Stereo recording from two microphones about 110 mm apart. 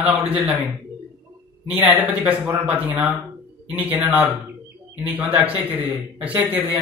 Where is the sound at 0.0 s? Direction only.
15° right (ahead or behind).